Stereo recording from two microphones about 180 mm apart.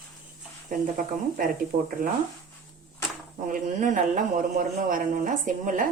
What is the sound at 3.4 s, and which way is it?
A woman's voice, 45° right (ahead or behind).